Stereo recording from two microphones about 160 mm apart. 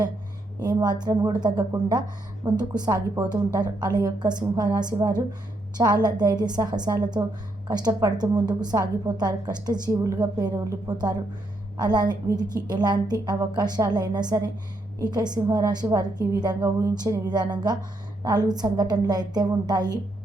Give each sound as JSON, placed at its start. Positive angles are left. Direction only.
{"t": 0.6, "sound": "a woman's voice", "side_deg": -25}